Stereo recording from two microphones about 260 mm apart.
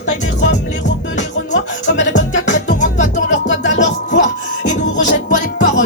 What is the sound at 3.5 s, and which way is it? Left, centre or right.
Music, left.